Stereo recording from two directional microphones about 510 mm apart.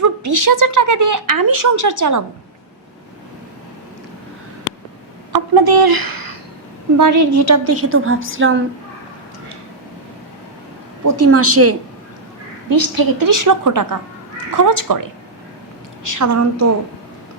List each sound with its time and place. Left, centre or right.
0.0 s a woman's voice: right
5.3 s a sound: right
6.9 s a woman's voice: right
11.0 s a woman's voice: right
12.6 s a woman's voice: right
16.1 s a woman's voice: right